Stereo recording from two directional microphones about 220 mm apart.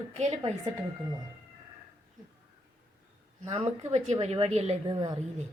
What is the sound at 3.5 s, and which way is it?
A woman's voice, 30° right (ahead or behind).